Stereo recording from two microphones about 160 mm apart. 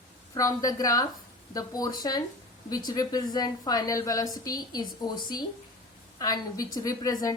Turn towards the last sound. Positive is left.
turn(degrees=25)  # may be behind; listen again after turning